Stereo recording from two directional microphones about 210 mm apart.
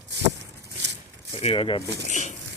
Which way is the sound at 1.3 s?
25° left (ahead or behind).